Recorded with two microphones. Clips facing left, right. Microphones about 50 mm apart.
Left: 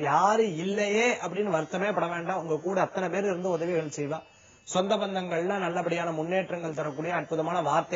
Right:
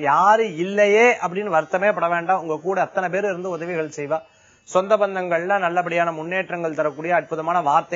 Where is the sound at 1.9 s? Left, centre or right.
Right.